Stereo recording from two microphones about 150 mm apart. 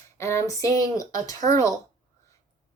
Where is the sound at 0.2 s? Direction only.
20° left (ahead or behind).